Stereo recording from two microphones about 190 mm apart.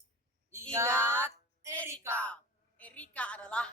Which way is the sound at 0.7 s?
15° right (ahead or behind).